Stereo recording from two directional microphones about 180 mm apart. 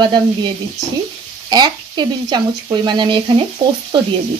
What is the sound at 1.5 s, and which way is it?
Speech, 25° right (ahead or behind).